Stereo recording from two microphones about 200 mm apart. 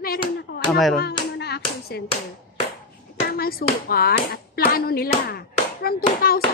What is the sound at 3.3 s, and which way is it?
A woman's voice, 50° left (ahead or behind).